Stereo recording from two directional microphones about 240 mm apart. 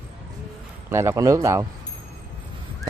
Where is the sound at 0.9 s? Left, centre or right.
Centre.